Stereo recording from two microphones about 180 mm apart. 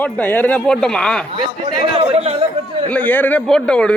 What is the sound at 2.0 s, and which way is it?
Speech, 35° right (ahead or behind).